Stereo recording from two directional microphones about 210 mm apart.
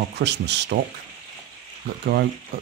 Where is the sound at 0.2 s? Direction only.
55° right (ahead or behind).